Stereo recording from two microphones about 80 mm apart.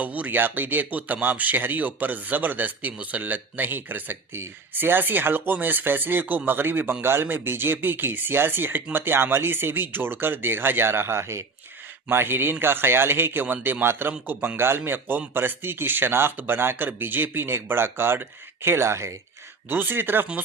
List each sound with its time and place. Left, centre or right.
0.0 s speech: centre